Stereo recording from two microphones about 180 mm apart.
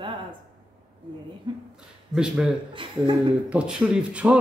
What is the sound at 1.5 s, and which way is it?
Speech, 25° right (ahead or behind).